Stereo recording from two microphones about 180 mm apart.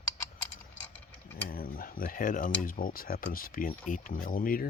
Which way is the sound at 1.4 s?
55° left (ahead or behind).